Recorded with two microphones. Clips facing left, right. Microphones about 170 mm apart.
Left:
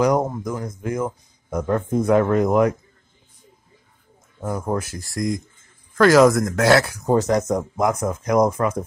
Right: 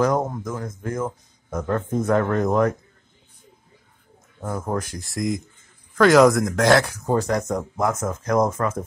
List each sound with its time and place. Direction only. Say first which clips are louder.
0.0 s speech: left 2 dB; 15° left (ahead or behind)
4.4 s speech: left 2 dB; 10° left (ahead or behind)
7.1 s speech: left 6 dB; 20° left (ahead or behind)